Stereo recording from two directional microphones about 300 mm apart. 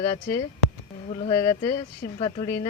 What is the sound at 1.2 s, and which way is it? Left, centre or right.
Speech, centre.